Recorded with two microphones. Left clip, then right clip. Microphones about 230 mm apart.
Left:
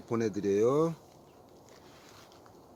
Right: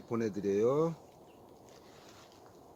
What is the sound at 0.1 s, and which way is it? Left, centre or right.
Speech, left.